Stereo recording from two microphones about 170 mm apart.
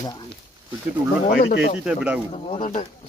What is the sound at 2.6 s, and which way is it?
Speech, 45° left (ahead or behind).